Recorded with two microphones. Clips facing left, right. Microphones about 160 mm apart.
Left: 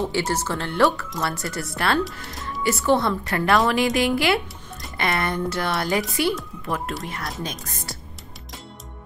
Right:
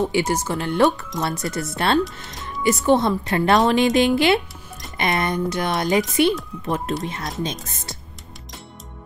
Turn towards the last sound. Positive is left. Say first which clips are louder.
# right 2 dB
turn(degrees=-20)  # may be behind; listen again after turning